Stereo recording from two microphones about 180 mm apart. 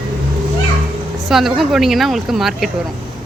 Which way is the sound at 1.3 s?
Centre (ahead or behind).